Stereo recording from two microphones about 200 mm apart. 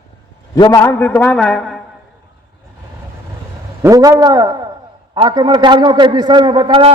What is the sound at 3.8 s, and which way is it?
A man's voice, 15° right (ahead or behind).